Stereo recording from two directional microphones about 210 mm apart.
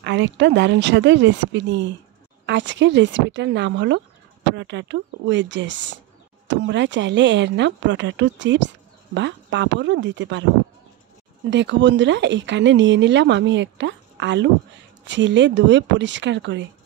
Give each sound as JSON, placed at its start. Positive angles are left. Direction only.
{"t": 0.0, "sound": "speech", "side_deg": -60}
{"t": 11.5, "sound": "speech", "side_deg": -60}